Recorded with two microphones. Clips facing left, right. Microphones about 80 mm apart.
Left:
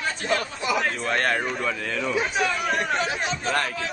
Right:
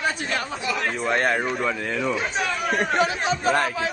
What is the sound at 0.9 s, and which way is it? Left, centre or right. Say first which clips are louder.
A man's voice: right 2 dB; centre.